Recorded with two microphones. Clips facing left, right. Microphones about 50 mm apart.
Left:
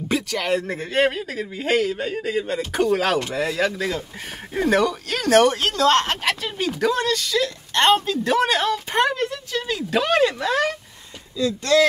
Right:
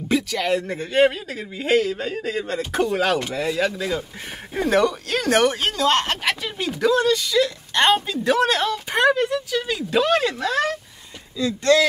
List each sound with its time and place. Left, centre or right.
0.1 s speech: centre
5.6 s speech: centre
11.3 s speech: right